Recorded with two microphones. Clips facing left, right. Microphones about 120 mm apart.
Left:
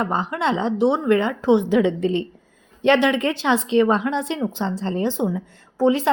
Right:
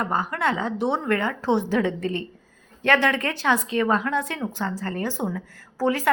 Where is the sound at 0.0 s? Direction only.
20° left (ahead or behind).